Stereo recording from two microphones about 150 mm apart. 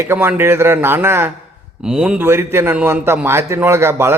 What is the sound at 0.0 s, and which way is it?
A man's voice, 15° right (ahead or behind).